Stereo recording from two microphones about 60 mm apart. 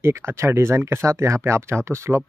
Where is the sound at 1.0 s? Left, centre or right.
Right.